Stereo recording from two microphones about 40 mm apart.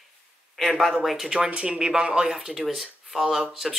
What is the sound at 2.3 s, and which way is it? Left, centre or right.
Speech, centre.